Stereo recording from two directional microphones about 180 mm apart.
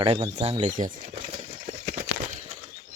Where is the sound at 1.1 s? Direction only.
35° right (ahead or behind).